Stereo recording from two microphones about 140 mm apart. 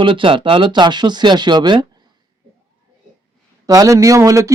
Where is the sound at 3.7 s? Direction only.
25° right (ahead or behind).